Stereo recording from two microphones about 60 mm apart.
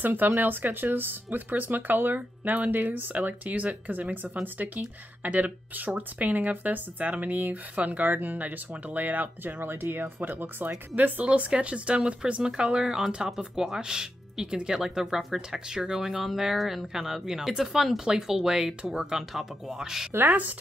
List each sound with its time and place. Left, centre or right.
0.0 s speech: right; by 20.1 s centre
20.1 s speech: right